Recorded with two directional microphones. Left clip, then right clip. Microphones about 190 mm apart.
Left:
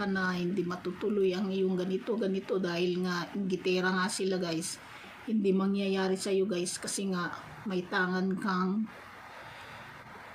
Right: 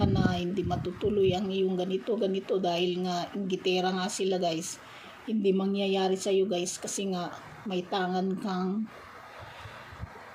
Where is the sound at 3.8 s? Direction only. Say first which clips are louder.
Right 1 dB; 10° left (ahead or behind).